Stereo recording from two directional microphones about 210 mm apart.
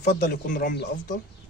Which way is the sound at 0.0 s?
45° left (ahead or behind).